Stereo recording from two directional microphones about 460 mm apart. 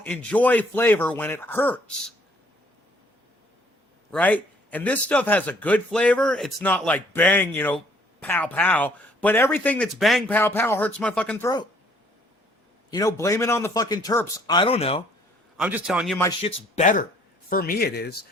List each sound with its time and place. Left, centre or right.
0.0 s a man's voice: centre
4.1 s a man's voice: centre
12.9 s a man's voice: centre
15.5 s a man's voice: centre; by 18.3 s left